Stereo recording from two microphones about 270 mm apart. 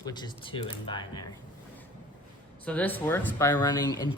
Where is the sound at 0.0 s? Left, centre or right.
Centre.